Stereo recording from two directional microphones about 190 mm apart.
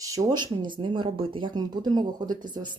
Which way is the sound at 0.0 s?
20° right (ahead or behind).